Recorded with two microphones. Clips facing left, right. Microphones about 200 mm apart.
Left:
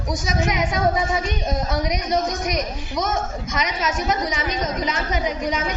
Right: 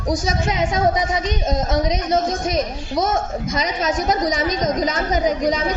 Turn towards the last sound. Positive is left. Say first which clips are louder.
# right 5 dB
turn(degrees=-35)  # may be behind; listen again after turning